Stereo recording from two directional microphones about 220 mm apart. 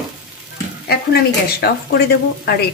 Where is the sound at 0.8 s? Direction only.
45° left (ahead or behind).